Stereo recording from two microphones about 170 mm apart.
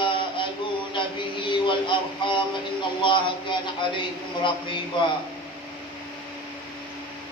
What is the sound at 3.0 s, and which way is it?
A man's voice, 30° left (ahead or behind).